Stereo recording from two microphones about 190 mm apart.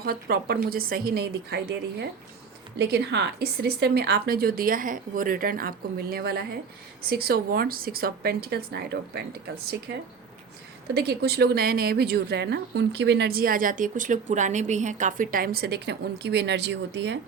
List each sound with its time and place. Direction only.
0.0 s a woman's voice: 55° right (ahead or behind)
10.9 s a woman's voice: 60° right (ahead or behind)